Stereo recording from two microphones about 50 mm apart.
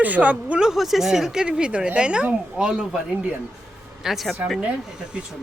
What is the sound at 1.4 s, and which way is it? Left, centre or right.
Speech, centre.